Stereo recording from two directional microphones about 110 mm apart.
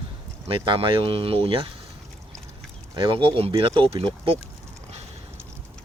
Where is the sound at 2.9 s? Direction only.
50° right (ahead or behind).